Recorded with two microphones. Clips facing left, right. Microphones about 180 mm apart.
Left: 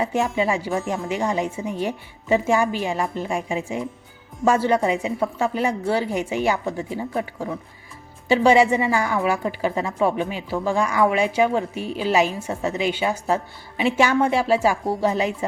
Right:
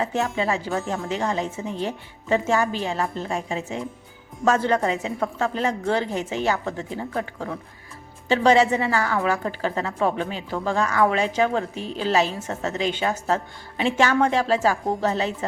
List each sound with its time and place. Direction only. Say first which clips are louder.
0.0 s a woman's voice: left 2 dB; 10° left (ahead or behind)